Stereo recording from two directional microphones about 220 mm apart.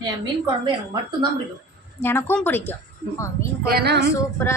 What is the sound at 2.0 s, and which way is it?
Speech, 10° left (ahead or behind).